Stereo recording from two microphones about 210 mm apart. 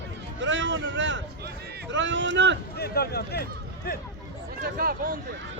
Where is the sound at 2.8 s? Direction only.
50° left (ahead or behind).